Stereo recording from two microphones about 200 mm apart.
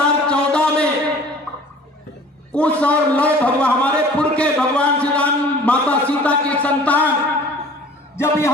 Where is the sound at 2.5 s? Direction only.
5° left (ahead or behind).